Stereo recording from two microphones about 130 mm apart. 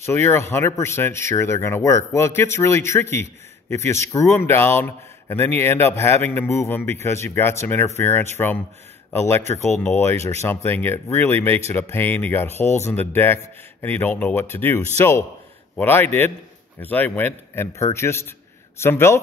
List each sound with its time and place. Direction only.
0.0 s speech: 20° left (ahead or behind)